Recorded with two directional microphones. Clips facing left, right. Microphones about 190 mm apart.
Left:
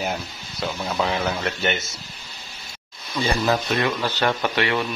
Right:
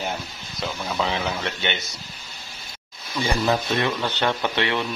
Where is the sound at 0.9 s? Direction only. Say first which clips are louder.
Left 2 dB; centre (ahead or behind).